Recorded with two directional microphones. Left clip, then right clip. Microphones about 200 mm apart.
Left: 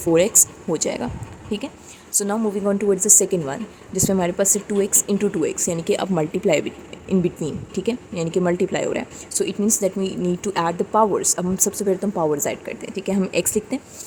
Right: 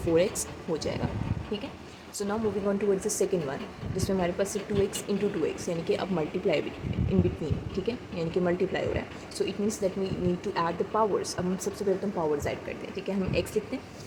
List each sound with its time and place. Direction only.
0.1 s speech: 60° left (ahead or behind)
2.1 s speech: 55° left (ahead or behind)